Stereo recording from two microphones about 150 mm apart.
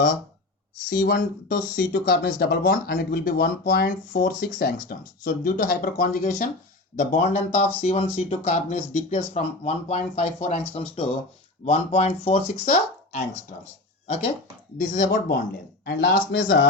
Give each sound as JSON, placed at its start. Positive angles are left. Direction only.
{"t": 1.0, "sound": "speech", "side_deg": 85}
{"t": 4.4, "sound": "speech", "side_deg": 85}
{"t": 14.8, "sound": "speech", "side_deg": 60}
{"t": 15.8, "sound": "speech", "side_deg": 90}